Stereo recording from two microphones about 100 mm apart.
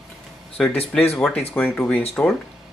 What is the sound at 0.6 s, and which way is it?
Speech, 5° left (ahead or behind).